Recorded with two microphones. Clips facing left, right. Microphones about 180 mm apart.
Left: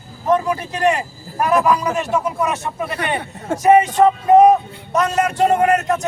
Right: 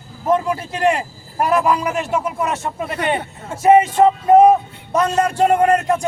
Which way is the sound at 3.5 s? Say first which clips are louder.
Left 9 dB; 75° left (ahead or behind).